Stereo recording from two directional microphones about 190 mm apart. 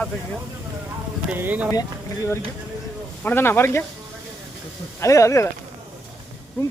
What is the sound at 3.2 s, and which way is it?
Speech, 10° left (ahead or behind).